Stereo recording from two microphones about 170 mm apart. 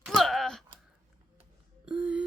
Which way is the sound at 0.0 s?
Centre (ahead or behind).